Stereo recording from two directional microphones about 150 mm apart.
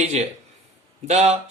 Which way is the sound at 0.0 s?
45° right (ahead or behind).